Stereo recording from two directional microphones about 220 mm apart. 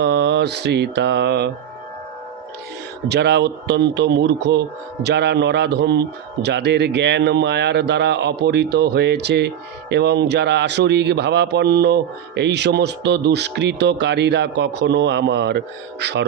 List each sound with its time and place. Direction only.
0.0 s mantra: 50° right (ahead or behind)
3.1 s speech: 50° right (ahead or behind)